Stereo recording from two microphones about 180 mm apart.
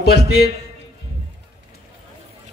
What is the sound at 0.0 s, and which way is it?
Speech, 60° left (ahead or behind).